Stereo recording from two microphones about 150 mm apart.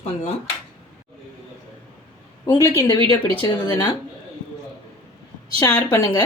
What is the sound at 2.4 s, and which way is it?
Speech, 25° left (ahead or behind).